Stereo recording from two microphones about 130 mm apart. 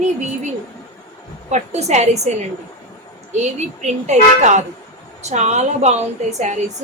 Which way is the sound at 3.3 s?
65° right (ahead or behind).